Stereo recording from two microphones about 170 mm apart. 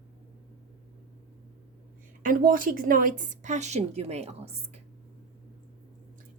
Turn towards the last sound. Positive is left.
turn(degrees=-35)  # may be behind; listen again after turning